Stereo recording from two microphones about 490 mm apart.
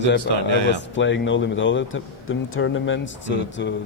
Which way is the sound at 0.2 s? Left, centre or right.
Right.